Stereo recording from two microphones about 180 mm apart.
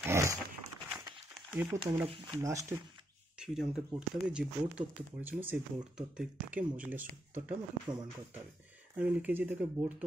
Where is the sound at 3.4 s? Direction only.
5° right (ahead or behind).